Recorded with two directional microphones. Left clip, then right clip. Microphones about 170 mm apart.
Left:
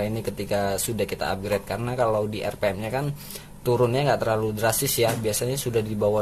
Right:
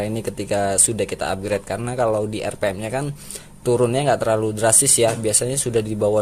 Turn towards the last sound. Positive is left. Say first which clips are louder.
# right 4 dB
turn(degrees=-25)  # may be behind; listen again after turning